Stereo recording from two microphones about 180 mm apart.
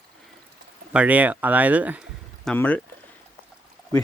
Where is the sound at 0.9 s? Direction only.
10° right (ahead or behind).